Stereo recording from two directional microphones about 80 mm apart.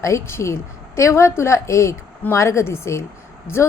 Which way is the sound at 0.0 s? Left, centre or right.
Left.